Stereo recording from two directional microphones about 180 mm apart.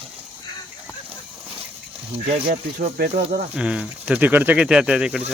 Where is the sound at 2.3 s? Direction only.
50° right (ahead or behind).